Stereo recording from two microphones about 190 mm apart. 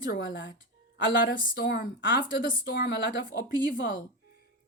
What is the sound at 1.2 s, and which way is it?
A woman's voice, 50° left (ahead or behind).